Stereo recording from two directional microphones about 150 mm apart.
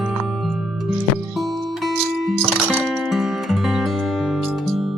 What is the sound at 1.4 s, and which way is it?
Music, centre (ahead or behind).